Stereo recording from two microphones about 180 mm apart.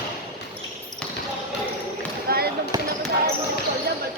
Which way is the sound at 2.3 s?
60° right (ahead or behind).